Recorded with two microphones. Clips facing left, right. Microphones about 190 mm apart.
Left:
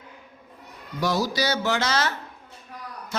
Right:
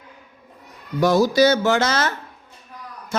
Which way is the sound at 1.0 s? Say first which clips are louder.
Right 9 dB; 50° right (ahead or behind).